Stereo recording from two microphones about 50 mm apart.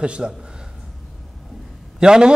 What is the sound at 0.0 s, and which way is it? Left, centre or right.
Speech, right.